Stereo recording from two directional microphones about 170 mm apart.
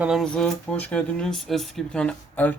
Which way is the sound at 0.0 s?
Centre (ahead or behind).